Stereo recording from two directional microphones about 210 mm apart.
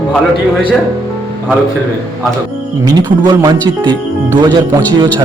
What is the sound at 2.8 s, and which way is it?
Speech, 20° right (ahead or behind).